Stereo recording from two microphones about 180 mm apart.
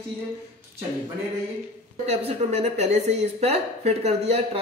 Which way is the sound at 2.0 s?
35° right (ahead or behind).